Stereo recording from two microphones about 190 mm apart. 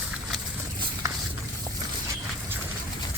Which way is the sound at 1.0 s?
15° right (ahead or behind).